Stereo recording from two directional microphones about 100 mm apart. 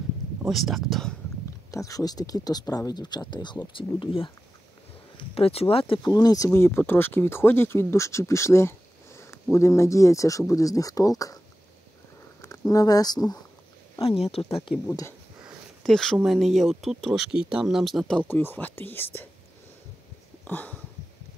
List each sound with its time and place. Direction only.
0.5 s speech: centre (ahead or behind)
1.7 s speech: 35° left (ahead or behind)
3.7 s speech: 60° left (ahead or behind)
5.1 s speech: 75° left (ahead or behind)
6.0 s speech: 40° left (ahead or behind)
6.5 s speech: 25° left (ahead or behind)
12.4 s speech: 35° left (ahead or behind)
14.0 s speech: 90° left
14.9 s speech: 30° left (ahead or behind)
15.8 s speech: 5° left (ahead or behind)
18.3 s speech: 20° left (ahead or behind)
20.4 s a sound: 15° left (ahead or behind)